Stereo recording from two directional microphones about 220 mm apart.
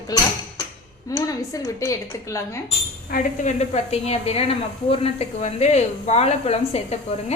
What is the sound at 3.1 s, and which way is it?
A woman's voice, 30° left (ahead or behind).